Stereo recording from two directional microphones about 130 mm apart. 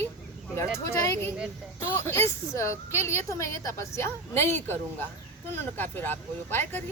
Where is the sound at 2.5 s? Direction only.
20° left (ahead or behind).